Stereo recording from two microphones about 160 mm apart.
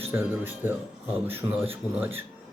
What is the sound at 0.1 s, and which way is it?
A man's voice, 15° right (ahead or behind).